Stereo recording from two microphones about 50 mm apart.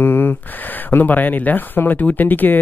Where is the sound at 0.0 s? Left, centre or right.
Left.